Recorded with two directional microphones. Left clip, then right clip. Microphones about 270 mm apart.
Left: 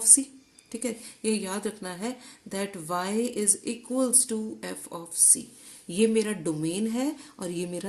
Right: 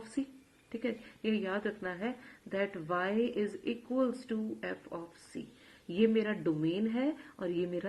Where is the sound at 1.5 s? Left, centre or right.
Left.